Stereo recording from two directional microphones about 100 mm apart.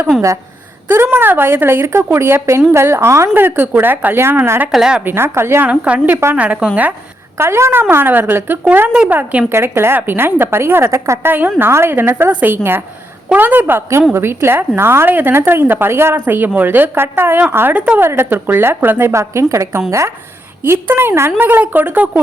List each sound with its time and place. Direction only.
0.1 s a woman's voice: centre (ahead or behind)
0.9 s a woman's voice: 25° right (ahead or behind)
4.7 s a woman's voice: 5° right (ahead or behind)
5.0 s a woman's voice: 25° right (ahead or behind)
7.3 s a woman's voice: 25° right (ahead or behind)
20.8 s a woman's voice: 20° right (ahead or behind)